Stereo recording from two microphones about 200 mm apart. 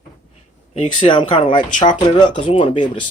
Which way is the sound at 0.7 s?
30° left (ahead or behind).